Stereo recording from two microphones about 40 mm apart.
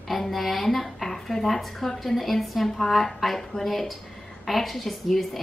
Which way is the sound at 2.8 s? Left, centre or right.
Centre.